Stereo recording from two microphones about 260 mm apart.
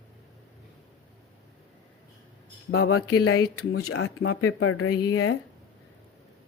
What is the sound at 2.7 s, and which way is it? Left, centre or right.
Speech, left.